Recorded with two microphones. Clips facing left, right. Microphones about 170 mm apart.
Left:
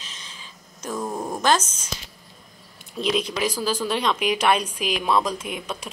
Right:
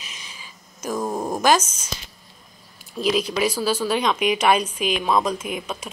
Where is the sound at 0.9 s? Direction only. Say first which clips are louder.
Right 3 dB; 20° right (ahead or behind).